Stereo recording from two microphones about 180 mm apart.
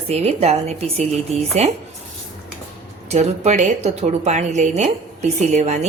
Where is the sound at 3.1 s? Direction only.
40° right (ahead or behind).